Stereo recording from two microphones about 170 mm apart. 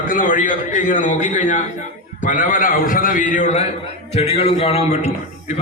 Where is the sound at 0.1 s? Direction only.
50° left (ahead or behind).